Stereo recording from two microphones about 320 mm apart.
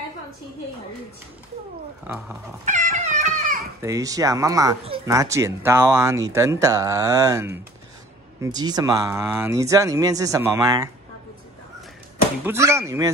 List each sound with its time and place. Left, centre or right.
2.1 s speech: centre
2.6 s cat: right
3.8 s speech: centre
12.4 s speech: centre